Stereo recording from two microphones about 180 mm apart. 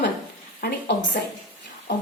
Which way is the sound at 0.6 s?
65° left (ahead or behind).